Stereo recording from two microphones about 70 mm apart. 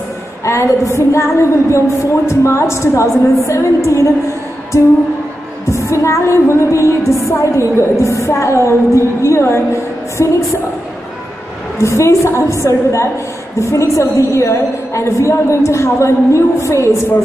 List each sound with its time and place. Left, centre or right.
0.5 s music: left
5.7 s music: left
11.8 s music: left